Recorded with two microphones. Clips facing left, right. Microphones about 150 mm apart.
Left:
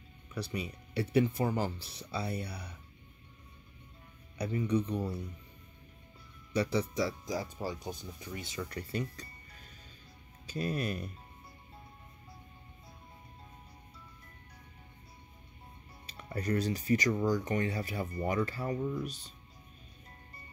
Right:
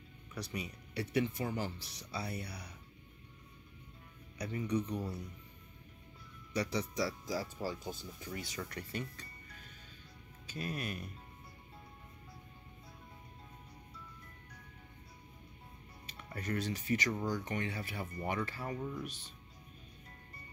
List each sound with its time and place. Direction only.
0.3 s speech: 30° left (ahead or behind)
4.4 s speech: 30° left (ahead or behind)
6.5 s speech: 30° left (ahead or behind)
16.1 s speech: 35° left (ahead or behind)